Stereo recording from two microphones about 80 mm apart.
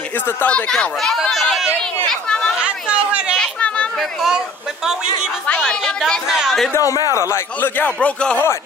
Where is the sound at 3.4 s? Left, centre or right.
Centre.